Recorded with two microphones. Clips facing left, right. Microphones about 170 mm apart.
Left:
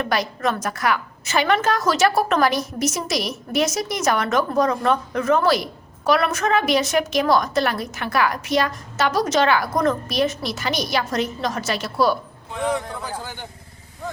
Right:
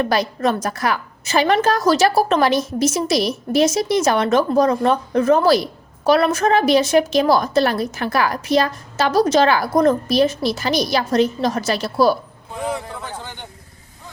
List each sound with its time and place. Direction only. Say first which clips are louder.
0.0 s a woman's voice: right 4 dB; 30° right (ahead or behind)
12.6 s a man's voice: left 2 dB; 5° right (ahead or behind)